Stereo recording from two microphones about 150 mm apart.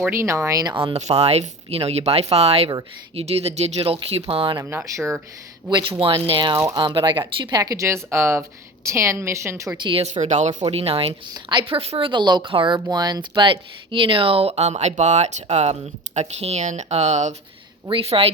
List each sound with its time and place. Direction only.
0.0 s speech: 15° right (ahead or behind)
0.9 s speech: 45° right (ahead or behind)
4.5 s speech: 15° right (ahead or behind)
6.0 s a woman's voice: 40° right (ahead or behind); by 9.7 s 20° right (ahead or behind)
9.8 s a woman's voice: 35° right (ahead or behind)
10.1 s speech: 50° right (ahead or behind)
10.5 s a woman's voice: 35° right (ahead or behind)
17.8 s a woman's voice: 40° right (ahead or behind)